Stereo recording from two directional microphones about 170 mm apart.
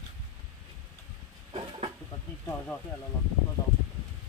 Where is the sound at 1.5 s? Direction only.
30° right (ahead or behind).